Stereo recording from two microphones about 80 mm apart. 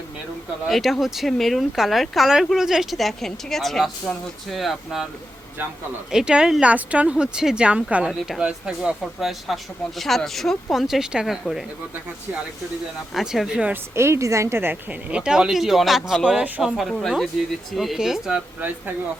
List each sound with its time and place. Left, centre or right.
0.7 s speech: centre
6.1 s speech: centre
13.1 s speech: centre
13.9 s a woman's voice: right
15.1 s speech: centre
16.2 s speech: centre